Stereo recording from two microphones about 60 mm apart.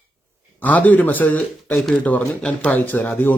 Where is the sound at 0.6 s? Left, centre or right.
Left.